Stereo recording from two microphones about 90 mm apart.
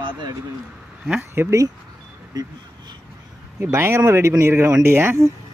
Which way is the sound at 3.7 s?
30° right (ahead or behind).